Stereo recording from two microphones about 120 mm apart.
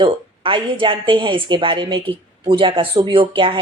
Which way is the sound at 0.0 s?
45° right (ahead or behind).